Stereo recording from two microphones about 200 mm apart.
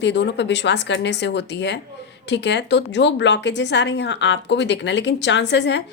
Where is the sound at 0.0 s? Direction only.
60° left (ahead or behind).